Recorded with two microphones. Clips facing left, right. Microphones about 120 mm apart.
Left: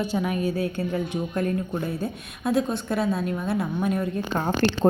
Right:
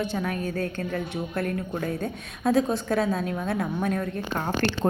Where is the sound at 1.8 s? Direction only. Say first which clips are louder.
Even; 5° left (ahead or behind).